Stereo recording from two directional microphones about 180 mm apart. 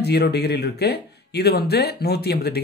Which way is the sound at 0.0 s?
65° left (ahead or behind).